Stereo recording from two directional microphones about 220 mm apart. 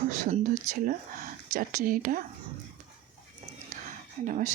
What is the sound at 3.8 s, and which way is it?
Whispering, 35° right (ahead or behind).